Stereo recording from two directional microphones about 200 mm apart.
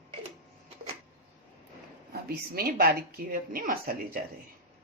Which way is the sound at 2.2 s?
50° right (ahead or behind).